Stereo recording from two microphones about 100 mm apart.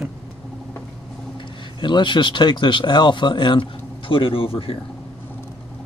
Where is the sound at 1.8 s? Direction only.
50° left (ahead or behind); by 4.8 s 70° left (ahead or behind).